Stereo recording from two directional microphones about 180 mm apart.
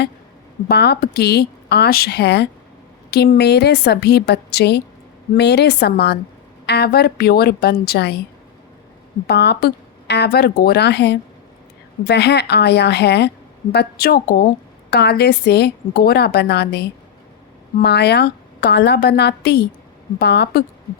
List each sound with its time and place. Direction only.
0.7 s a woman's voice: 65° left (ahead or behind)
9.2 s a woman's voice: 65° left (ahead or behind)